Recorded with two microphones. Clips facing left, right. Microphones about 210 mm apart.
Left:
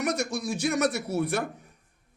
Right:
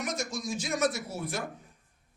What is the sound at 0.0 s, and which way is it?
A man's voice, 65° left (ahead or behind).